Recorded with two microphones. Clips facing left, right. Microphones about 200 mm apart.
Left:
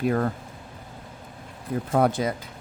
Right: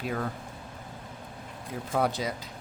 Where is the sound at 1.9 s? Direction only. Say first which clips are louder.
Left 6 dB; 50° left (ahead or behind).